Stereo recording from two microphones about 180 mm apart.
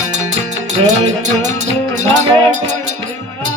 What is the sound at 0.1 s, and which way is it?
Music, 40° right (ahead or behind).